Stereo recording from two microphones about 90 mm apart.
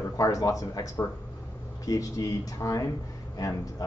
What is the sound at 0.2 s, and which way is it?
Speech, 40° left (ahead or behind).